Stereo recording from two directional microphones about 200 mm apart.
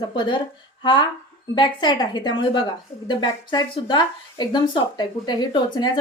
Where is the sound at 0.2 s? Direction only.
25° left (ahead or behind).